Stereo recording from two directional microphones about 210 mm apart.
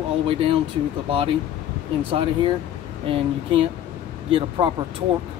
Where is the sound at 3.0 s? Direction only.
25° right (ahead or behind).